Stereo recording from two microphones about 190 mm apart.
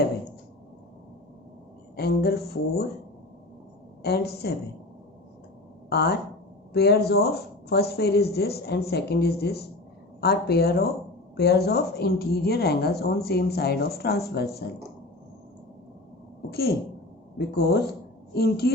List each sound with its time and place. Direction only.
2.0 s a woman's voice: 55° left (ahead or behind)
4.0 s a woman's voice: 60° left (ahead or behind)
5.9 s a woman's voice: 55° left (ahead or behind)
16.5 s a woman's voice: 55° left (ahead or behind)